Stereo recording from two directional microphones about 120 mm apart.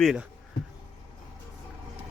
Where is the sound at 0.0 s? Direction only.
5° right (ahead or behind).